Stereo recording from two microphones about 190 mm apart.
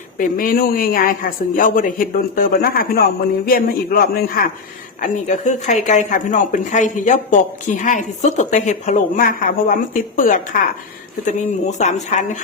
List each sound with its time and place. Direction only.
0.2 s a man's voice: 45° left (ahead or behind)
5.0 s a woman's voice: 40° left (ahead or behind)